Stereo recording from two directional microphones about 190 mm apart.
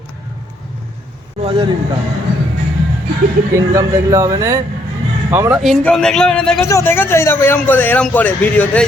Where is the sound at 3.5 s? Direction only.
15° right (ahead or behind).